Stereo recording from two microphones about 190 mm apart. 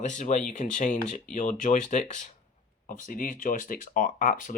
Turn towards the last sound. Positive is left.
turn(degrees=45)  # may be behind; listen again after turning